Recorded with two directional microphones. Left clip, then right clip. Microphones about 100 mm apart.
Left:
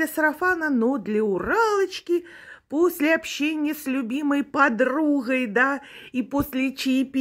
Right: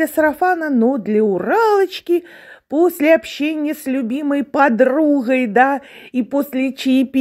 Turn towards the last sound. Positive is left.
turn(degrees=-20)  # may be behind; listen again after turning